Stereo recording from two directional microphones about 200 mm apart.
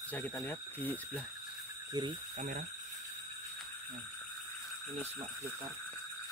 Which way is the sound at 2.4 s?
40° right (ahead or behind).